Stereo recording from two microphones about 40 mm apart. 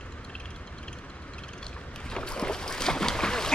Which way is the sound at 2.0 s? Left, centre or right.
Left.